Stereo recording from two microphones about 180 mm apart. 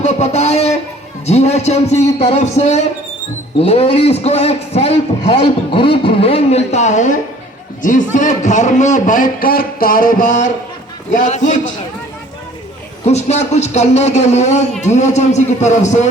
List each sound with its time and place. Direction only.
0.0 s a man's voice: 35° left (ahead or behind)
13.1 s a man's voice: 40° left (ahead or behind)